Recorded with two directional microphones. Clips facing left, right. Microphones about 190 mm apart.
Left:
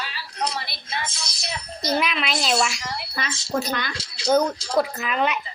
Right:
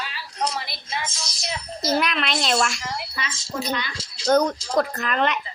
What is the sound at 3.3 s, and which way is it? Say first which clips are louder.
Speech: left 4 dB; 70° left (ahead or behind).